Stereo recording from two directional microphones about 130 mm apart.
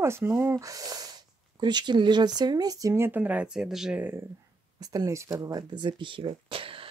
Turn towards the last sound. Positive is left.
turn(degrees=-45)  # may be behind; listen again after turning